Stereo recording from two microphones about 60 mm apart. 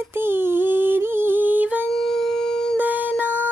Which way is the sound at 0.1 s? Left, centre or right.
Right.